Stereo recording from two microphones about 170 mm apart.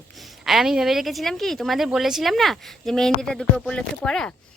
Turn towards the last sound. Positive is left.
turn(degrees=5)  # may be behind; listen again after turning